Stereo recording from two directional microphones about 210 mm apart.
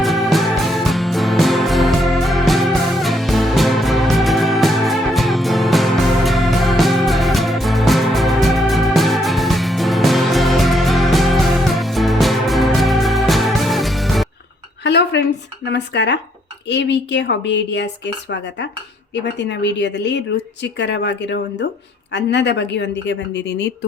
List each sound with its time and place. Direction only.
0.0 s music: centre (ahead or behind)
14.8 s dishes: 55° left (ahead or behind)
15.6 s a sound: 55° left (ahead or behind)
16.6 s a woman's voice: 55° left (ahead or behind)